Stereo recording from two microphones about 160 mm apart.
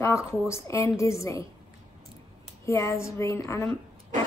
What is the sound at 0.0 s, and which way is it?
A woman's voice, 20° left (ahead or behind).